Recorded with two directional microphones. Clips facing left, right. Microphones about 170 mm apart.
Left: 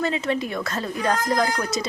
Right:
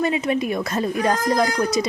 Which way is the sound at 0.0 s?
15° right (ahead or behind).